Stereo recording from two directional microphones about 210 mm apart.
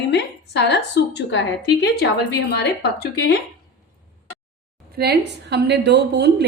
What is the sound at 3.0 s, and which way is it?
Speech, 50° left (ahead or behind).